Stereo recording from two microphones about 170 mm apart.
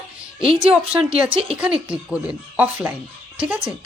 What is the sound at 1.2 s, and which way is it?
Speech, 30° right (ahead or behind).